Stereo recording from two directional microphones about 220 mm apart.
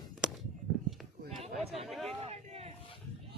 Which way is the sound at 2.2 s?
30° right (ahead or behind).